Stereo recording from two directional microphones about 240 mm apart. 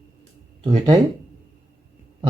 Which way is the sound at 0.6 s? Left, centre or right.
Right.